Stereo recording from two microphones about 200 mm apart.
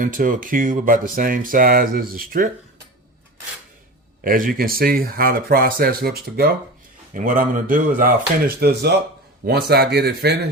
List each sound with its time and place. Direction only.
0.0 s speech: 45° right (ahead or behind)
4.2 s speech: 45° right (ahead or behind)